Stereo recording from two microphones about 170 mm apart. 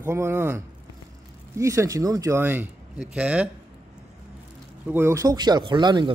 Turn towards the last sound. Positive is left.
turn(degrees=-25)  # may be behind; listen again after turning